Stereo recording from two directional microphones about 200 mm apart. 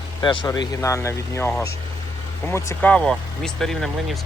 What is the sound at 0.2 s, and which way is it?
Speech, 25° left (ahead or behind).